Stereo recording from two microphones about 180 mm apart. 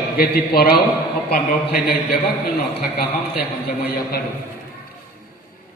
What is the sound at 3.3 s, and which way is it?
Speech, 55° left (ahead or behind).